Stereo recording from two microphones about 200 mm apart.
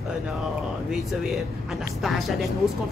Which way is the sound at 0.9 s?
Centre (ahead or behind).